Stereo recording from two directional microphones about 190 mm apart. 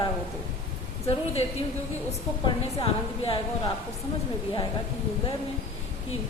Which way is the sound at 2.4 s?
30° left (ahead or behind).